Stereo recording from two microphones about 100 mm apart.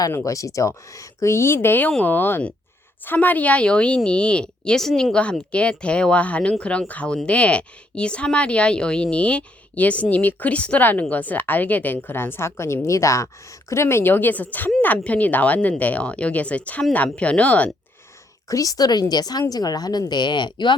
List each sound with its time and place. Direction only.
0.1 s a woman's voice: 30° left (ahead or behind)
18.4 s a woman's voice: 35° left (ahead or behind); by 20.7 s 50° left (ahead or behind)